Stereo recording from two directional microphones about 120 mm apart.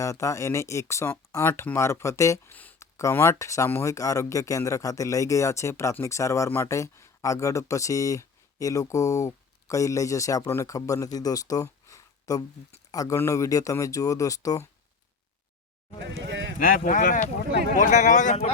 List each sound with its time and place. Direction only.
0.0 s speech: 25° left (ahead or behind)
2.6 s a sound: 15° left (ahead or behind)
2.8 s speech: 25° left (ahead or behind)
16.8 s speech: 90° left